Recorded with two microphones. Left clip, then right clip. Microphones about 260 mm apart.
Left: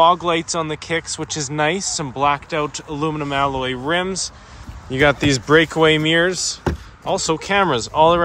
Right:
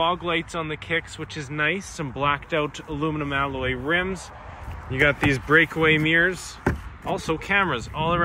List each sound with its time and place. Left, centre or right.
0.0 s speech: centre